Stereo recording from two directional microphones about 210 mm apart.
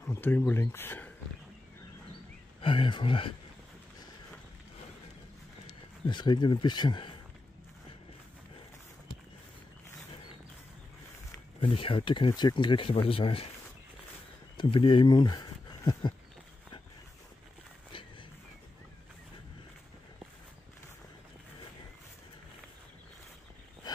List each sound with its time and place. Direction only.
0.0 s speech: 10° left (ahead or behind)
2.6 s speech: 25° left (ahead or behind)
5.7 s speech: 20° left (ahead or behind)
11.6 s speech: 25° left (ahead or behind)
14.6 s speech: 25° left (ahead or behind)